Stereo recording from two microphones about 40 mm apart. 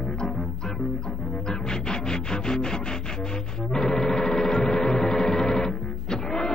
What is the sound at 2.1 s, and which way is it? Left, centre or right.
Music, centre.